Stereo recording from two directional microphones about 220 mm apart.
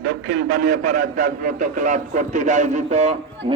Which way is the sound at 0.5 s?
45° right (ahead or behind).